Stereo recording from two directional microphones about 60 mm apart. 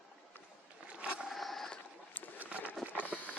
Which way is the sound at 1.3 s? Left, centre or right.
Centre.